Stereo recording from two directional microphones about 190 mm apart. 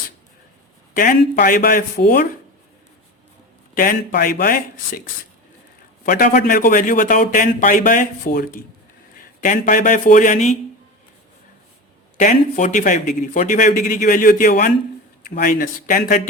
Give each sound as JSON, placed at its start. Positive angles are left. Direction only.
{"t": 0.9, "sound": "a man's voice", "side_deg": 45}
{"t": 3.8, "sound": "a man's voice", "side_deg": 45}
{"t": 6.1, "sound": "a man's voice", "side_deg": 50}
{"t": 12.1, "sound": "a man's voice", "side_deg": 45}